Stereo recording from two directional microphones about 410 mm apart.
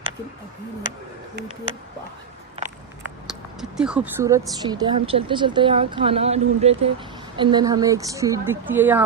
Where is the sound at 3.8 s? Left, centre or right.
Centre.